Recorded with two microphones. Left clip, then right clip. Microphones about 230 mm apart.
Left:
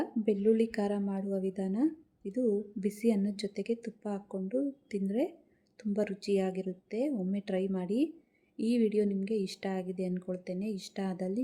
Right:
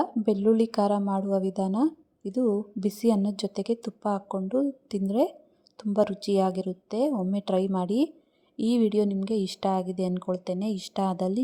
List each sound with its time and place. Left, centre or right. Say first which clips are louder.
0.0 s a woman's voice: right 5 dB; right